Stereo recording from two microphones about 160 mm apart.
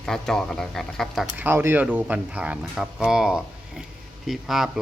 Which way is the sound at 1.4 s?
15° right (ahead or behind).